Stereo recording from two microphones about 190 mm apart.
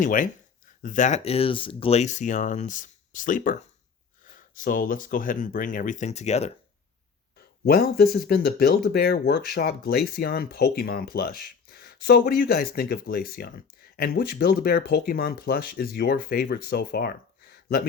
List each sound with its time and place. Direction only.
0.0 s speech: 45° left (ahead or behind)
7.6 s speech: 55° left (ahead or behind)